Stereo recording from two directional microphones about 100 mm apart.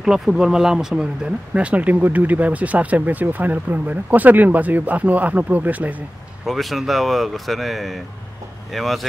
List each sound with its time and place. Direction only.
0.0 s speech: 5° right (ahead or behind)
6.4 s speech: centre (ahead or behind)